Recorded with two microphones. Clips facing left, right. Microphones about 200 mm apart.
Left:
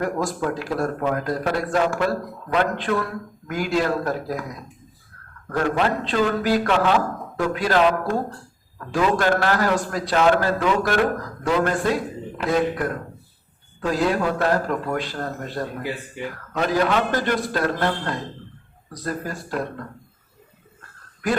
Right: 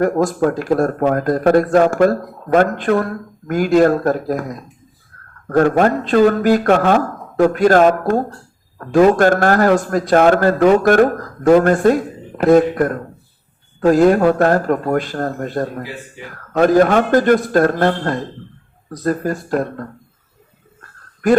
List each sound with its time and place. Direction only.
0.0 s speech: 50° right (ahead or behind)